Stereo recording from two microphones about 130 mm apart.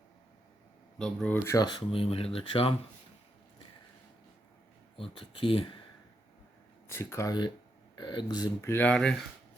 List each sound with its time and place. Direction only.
0.9 s speech: 5° left (ahead or behind)
1.5 s speech: 30° left (ahead or behind)
4.9 s speech: 45° left (ahead or behind)
6.8 s speech: 20° left (ahead or behind)
8.7 s speech: 10° left (ahead or behind)